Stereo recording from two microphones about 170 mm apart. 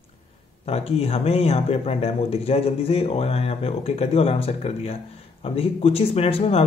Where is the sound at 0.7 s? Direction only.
35° left (ahead or behind).